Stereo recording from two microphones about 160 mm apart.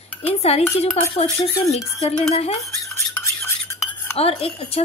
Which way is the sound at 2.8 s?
15° left (ahead or behind).